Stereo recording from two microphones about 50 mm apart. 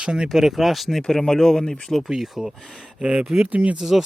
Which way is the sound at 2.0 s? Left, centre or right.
Centre.